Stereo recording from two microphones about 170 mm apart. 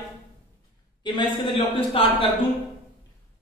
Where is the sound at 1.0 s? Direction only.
25° left (ahead or behind).